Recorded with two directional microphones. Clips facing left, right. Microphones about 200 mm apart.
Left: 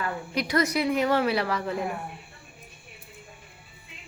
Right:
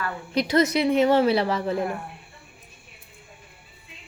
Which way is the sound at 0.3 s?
25° right (ahead or behind).